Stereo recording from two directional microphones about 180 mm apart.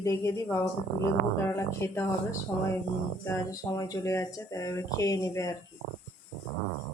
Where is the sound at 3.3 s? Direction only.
15° left (ahead or behind).